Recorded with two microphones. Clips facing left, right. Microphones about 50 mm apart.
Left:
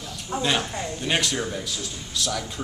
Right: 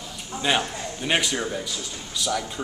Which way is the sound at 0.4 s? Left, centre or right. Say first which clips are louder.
Right 1 dB; centre.